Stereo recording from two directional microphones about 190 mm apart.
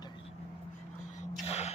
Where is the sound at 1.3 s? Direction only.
35° left (ahead or behind).